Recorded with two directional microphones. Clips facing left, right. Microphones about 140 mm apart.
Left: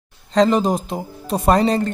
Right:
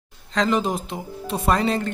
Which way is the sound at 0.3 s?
35° left (ahead or behind).